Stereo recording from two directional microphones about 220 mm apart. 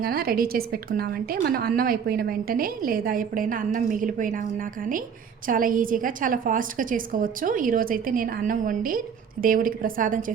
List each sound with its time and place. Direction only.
0.0 s a woman's voice: 45° right (ahead or behind)